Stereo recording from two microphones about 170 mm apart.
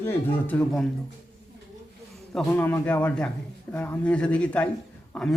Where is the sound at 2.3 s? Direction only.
15° left (ahead or behind).